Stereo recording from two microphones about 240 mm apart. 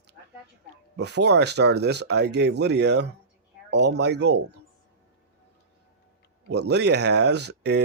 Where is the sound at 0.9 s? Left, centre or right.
Right.